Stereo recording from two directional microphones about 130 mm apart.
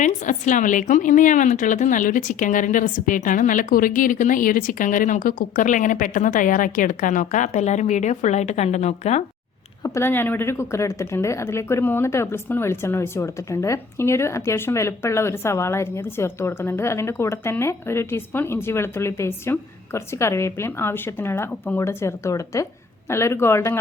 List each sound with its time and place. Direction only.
0.0 s a woman's voice: 75° left (ahead or behind)
9.8 s speech: 20° left (ahead or behind)